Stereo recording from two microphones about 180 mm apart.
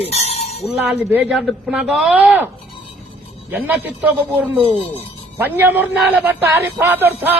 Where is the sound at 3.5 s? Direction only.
10° right (ahead or behind).